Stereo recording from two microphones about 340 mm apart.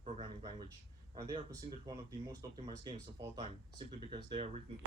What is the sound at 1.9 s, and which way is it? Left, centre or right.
Speech, centre.